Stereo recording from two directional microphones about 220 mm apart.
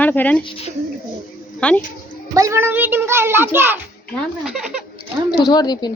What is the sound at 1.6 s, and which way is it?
Speech, 5° left (ahead or behind).